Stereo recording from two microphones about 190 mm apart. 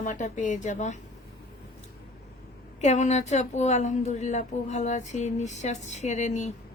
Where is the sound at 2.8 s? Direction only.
35° left (ahead or behind).